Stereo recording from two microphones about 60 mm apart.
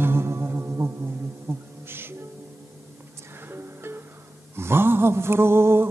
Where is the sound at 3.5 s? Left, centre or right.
Right.